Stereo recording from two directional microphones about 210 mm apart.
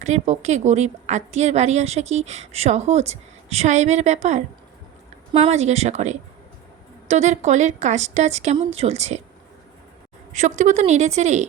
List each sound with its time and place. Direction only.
0.0 s a woman's voice: 35° right (ahead or behind)
10.3 s a woman's voice: 35° right (ahead or behind)